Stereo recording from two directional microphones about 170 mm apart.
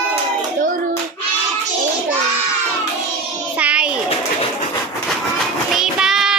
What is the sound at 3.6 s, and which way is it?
Child singing, 5° right (ahead or behind).